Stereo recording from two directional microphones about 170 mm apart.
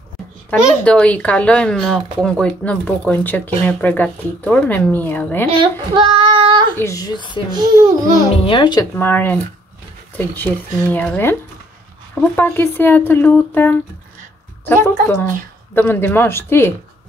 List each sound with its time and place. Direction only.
0.5 s speech: 10° left (ahead or behind)
5.5 s a child's voice: 30° right (ahead or behind)
6.8 s a child's voice: 20° left (ahead or behind)
7.5 s a child's voice: 20° right (ahead or behind)
8.5 s a child's voice: 25° left (ahead or behind)
8.9 s speech: 10° left (ahead or behind)